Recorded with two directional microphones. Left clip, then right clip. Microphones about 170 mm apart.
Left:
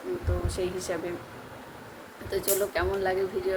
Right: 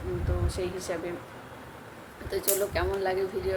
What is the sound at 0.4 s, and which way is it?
Speech, centre (ahead or behind).